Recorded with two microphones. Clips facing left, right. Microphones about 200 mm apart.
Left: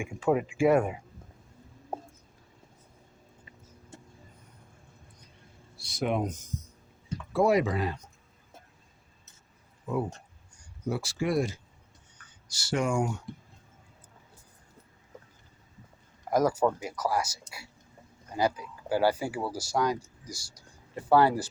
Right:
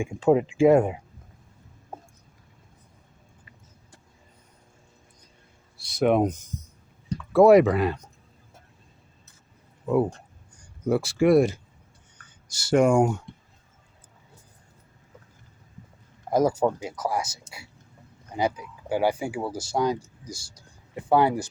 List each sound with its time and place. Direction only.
0.0 s speech: 25° right (ahead or behind)
5.8 s speech: 60° right (ahead or behind)
9.8 s speech: 60° right (ahead or behind)
12.1 s speech: 50° right (ahead or behind)
16.3 s speech: 25° right (ahead or behind)
18.3 s speech: 20° right (ahead or behind)